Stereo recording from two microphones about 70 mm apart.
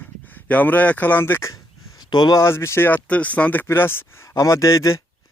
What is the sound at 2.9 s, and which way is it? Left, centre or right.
Speech, centre.